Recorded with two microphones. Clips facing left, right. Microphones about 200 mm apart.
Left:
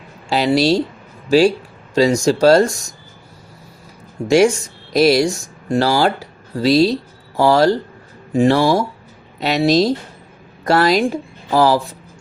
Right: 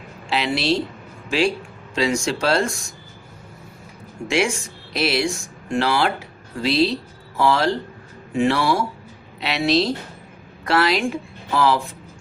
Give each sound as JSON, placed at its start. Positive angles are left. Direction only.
{"t": 0.3, "sound": "speech", "side_deg": 40}
{"t": 4.3, "sound": "a woman's voice", "side_deg": 40}